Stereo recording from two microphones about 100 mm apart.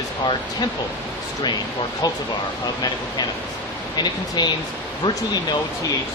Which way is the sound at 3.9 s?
45° left (ahead or behind).